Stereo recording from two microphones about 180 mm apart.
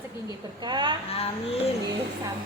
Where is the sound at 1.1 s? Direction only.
35° left (ahead or behind).